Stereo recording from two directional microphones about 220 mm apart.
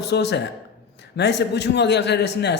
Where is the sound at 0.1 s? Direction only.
50° left (ahead or behind).